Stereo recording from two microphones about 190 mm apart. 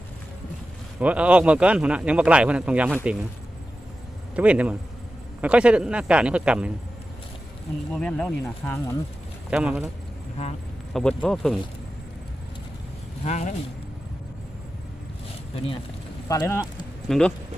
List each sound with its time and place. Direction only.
0.9 s speech: 5° right (ahead or behind)
4.4 s speech: 5° right (ahead or behind)
7.9 s speech: 5° left (ahead or behind)
9.5 s speech: 5° right (ahead or behind)
10.9 s speech: 5° left (ahead or behind)
13.2 s speech: 35° left (ahead or behind)
16.3 s speech: 15° left (ahead or behind)
17.1 s speech: 5° left (ahead or behind)